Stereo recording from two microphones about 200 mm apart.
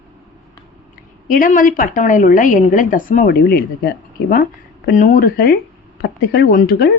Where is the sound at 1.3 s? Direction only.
45° left (ahead or behind).